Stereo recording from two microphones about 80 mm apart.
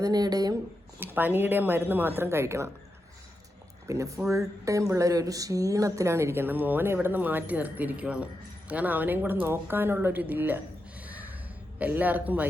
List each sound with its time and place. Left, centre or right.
0.0 s speech: right
0.9 s speech: right
3.8 s speech: right
11.8 s speech: centre